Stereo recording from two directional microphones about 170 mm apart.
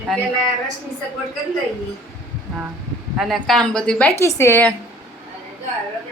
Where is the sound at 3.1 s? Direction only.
Centre (ahead or behind).